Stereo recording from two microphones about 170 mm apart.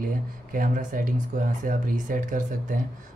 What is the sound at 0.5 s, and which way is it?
Speech, 55° right (ahead or behind).